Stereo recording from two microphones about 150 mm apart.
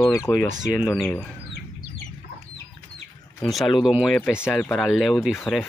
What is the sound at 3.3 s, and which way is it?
Speech, centre (ahead or behind).